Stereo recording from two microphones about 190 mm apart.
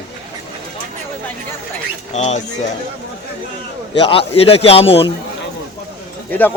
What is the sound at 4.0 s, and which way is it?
A man's voice, 30° left (ahead or behind).